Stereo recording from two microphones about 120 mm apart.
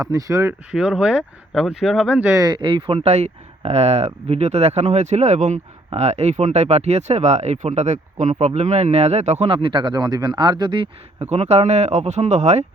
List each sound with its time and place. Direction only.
0.0 s speech: 30° right (ahead or behind)
0.7 s speech: 5° right (ahead or behind)
2.3 s speech: 35° right (ahead or behind); by 5.5 s 80° right
5.9 s speech: 65° right (ahead or behind)
9.5 s speech: 50° right (ahead or behind)
11.2 s speech: 65° right (ahead or behind)